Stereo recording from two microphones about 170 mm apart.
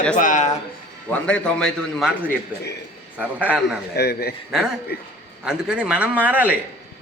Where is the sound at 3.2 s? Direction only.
10° right (ahead or behind).